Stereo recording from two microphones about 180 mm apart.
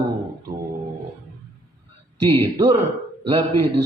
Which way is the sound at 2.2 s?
30° right (ahead or behind).